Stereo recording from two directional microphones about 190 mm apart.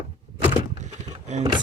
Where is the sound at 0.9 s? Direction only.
35° right (ahead or behind).